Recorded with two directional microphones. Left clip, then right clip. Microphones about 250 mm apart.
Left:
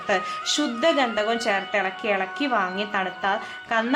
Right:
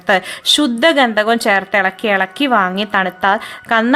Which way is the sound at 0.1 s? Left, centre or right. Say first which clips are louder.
Right 11 dB; right.